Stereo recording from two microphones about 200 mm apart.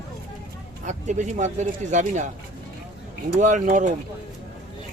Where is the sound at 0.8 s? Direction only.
35° right (ahead or behind).